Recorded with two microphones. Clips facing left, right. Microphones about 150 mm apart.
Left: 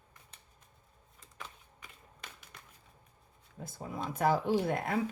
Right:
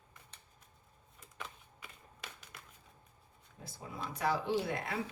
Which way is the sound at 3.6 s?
50° left (ahead or behind).